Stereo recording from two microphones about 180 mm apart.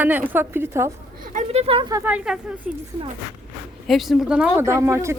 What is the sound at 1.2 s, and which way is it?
Speech, 40° right (ahead or behind).